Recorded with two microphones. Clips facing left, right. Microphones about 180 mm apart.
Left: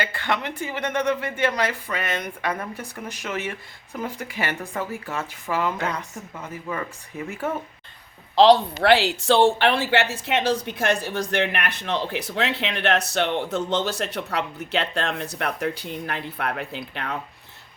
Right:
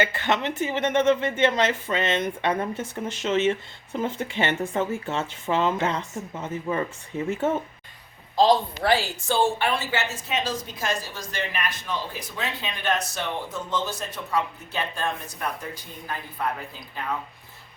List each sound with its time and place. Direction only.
0.0 s a woman's voice: 20° right (ahead or behind)
8.4 s speech: 70° left (ahead or behind)